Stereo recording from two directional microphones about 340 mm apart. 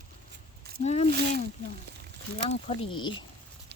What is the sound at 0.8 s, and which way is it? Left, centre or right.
Speech, centre.